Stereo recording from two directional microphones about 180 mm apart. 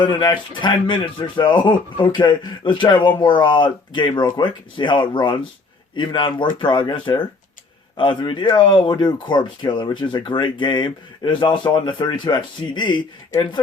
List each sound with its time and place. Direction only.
0.0 s speech: 25° left (ahead or behind)